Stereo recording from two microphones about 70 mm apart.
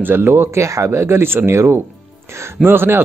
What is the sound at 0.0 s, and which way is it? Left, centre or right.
Speech, right.